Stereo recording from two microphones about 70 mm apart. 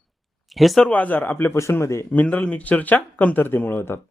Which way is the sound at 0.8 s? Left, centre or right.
Left.